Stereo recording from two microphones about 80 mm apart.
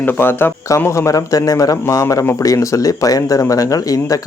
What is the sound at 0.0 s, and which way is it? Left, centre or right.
Speech, left.